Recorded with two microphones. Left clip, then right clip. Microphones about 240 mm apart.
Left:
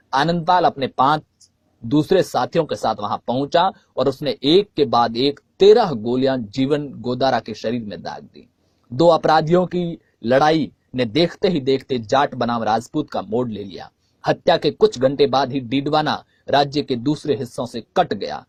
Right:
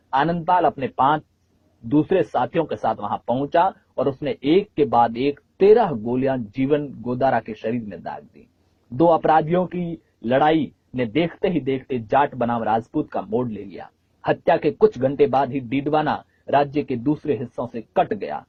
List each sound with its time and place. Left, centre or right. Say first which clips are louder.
0.1 s speech: left 2 dB; left